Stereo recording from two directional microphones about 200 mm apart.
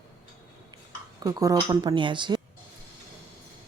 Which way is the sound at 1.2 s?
20° right (ahead or behind).